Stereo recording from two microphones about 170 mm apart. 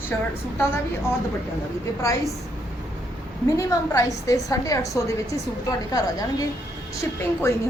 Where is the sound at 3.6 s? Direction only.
20° left (ahead or behind).